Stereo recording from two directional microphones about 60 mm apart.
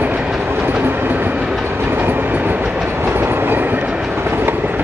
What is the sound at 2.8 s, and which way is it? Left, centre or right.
Train, right.